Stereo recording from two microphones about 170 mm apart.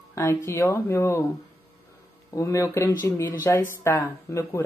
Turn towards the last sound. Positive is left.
turn(degrees=15)  # may be behind; listen again after turning